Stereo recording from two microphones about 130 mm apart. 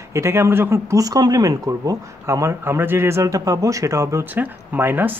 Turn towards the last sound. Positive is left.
turn(degrees=-15)  # may be behind; listen again after turning